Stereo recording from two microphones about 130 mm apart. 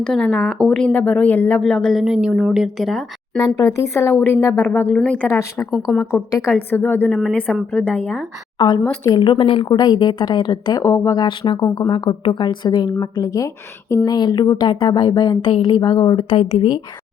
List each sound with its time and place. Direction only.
0.0 s speech: 5° left (ahead or behind)
3.6 s speech: 25° left (ahead or behind)
5.7 s speech: 5° right (ahead or behind)
6.5 s speech: 15° left (ahead or behind)
8.5 s a woman's voice: 35° left (ahead or behind)
9.7 s speech: 35° left (ahead or behind)
11.2 s speech: 35° left (ahead or behind)